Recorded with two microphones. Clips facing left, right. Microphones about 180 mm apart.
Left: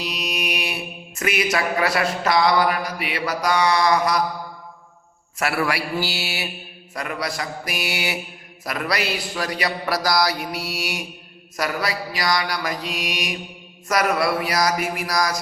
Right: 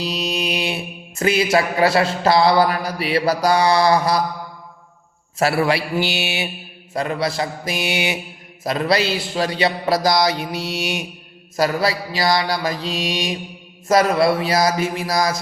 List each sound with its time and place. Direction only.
0.0 s mantra: 30° right (ahead or behind)
5.4 s speech: 25° right (ahead or behind)